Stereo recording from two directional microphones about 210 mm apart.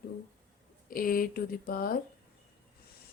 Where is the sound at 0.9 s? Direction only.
40° left (ahead or behind).